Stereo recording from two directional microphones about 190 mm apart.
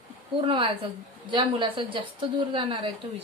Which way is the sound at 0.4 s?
25° right (ahead or behind).